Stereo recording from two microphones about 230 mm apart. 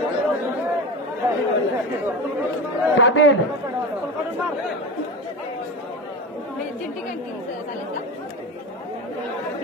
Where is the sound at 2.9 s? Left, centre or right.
Left.